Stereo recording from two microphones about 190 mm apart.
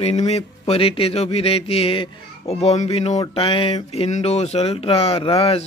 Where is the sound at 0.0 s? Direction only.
35° left (ahead or behind).